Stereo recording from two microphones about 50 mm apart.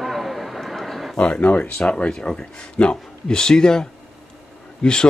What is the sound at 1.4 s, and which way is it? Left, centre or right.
Speech, left.